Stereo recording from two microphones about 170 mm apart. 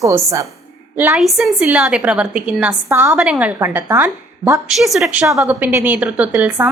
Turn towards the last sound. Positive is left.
turn(degrees=-10)  # may be behind; listen again after turning